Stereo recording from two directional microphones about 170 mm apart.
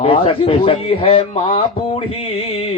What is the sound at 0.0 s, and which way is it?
Speech, 30° left (ahead or behind).